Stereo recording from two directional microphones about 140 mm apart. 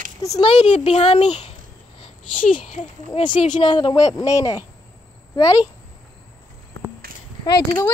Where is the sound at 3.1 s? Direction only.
40° left (ahead or behind).